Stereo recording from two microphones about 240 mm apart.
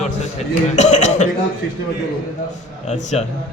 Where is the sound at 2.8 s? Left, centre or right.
Left.